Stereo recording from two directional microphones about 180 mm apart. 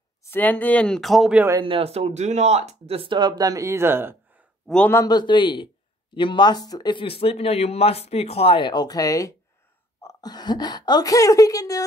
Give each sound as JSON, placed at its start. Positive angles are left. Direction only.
{"t": 0.2, "sound": "speech", "side_deg": 10}
{"t": 1.6, "sound": "speech", "side_deg": -30}
{"t": 4.6, "sound": "a man's voice", "side_deg": 5}
{"t": 5.0, "sound": "speech", "side_deg": 25}